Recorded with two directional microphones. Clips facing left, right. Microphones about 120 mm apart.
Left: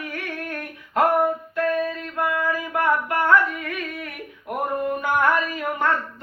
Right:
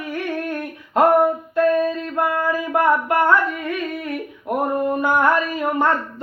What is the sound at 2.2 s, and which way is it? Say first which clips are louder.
Singing: right 3 dB; 30° right (ahead or behind).